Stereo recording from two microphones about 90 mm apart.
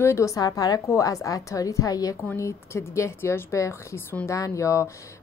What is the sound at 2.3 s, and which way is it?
A woman's voice, 30° left (ahead or behind).